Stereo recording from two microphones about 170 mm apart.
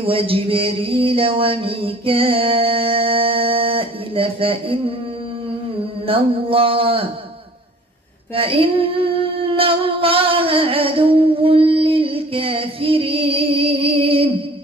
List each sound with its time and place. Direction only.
0.0 s child singing: 30° right (ahead or behind)
6.0 s child singing: 30° right (ahead or behind)
8.4 s child singing: 30° right (ahead or behind)